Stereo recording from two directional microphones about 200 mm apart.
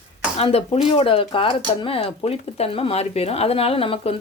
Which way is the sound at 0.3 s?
30° left (ahead or behind).